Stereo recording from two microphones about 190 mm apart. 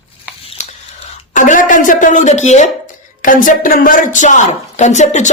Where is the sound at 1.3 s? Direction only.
45° left (ahead or behind).